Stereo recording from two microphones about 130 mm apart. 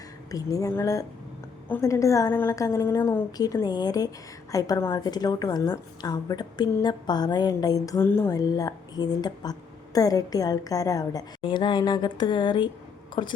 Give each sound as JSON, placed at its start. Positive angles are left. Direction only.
{"t": 0.3, "sound": "a woman's voice", "side_deg": 25}
{"t": 8.0, "sound": "a woman's voice", "side_deg": 15}
{"t": 8.3, "sound": "a woman's voice", "side_deg": 25}